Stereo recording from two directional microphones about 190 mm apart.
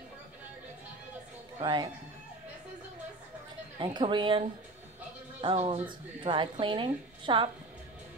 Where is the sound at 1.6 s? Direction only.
25° right (ahead or behind).